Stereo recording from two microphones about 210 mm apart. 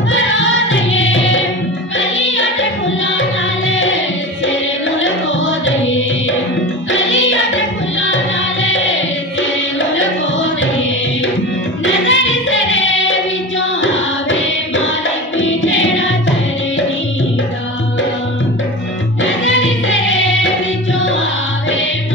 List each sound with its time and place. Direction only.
0.1 s music: 65° left (ahead or behind)
5.7 s music: 65° left (ahead or behind)
11.8 s music: 65° left (ahead or behind)
15.3 s music: 65° left (ahead or behind)
19.2 s music: 65° left (ahead or behind)